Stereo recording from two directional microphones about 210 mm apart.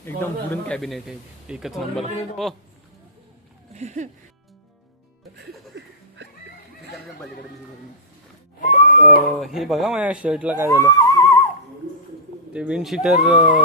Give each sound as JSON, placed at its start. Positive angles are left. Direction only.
{"t": 0.2, "sound": "speech", "side_deg": 10}
{"t": 3.8, "sound": "music", "side_deg": -35}
{"t": 5.4, "sound": "music", "side_deg": -55}
{"t": 8.6, "sound": "a sound", "side_deg": 35}
{"t": 9.4, "sound": "speech", "side_deg": 0}
{"t": 10.7, "sound": "music", "side_deg": 15}
{"t": 12.5, "sound": "speech", "side_deg": -5}